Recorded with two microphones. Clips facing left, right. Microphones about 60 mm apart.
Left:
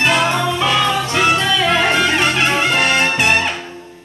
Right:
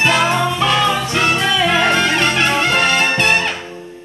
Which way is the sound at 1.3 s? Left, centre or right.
Right.